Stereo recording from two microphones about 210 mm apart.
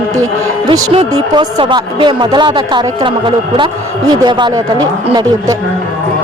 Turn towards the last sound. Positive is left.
turn(degrees=-15)  # may be behind; listen again after turning